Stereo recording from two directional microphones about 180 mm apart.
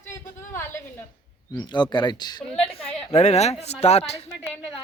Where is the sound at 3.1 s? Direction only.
35° left (ahead or behind).